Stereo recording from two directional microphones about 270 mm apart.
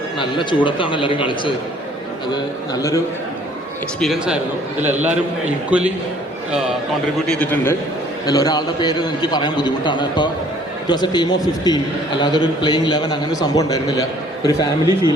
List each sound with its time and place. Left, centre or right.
0.2 s a man's voice: centre
4.0 s a man's voice: centre
7.3 s a man's voice: centre